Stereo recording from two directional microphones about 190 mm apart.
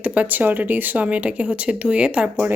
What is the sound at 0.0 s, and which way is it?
Speech, 10° right (ahead or behind).